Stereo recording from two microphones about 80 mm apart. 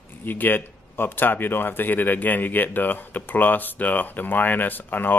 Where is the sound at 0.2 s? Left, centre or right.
Left.